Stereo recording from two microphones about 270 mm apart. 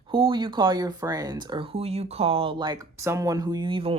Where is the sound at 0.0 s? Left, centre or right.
Centre.